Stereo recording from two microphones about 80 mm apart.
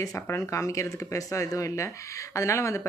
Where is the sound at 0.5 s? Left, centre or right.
Left.